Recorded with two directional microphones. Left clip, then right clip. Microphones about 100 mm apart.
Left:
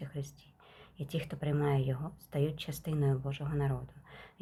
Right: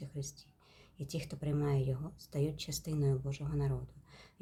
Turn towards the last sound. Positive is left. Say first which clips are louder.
# left 5 dB
turn(degrees=-25)  # may be behind; listen again after turning